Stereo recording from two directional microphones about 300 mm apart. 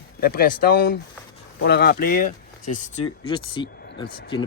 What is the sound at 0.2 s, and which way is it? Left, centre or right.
Speech, left.